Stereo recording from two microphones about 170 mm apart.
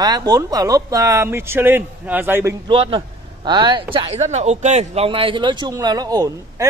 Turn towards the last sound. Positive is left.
turn(degrees=-20)  # may be behind; listen again after turning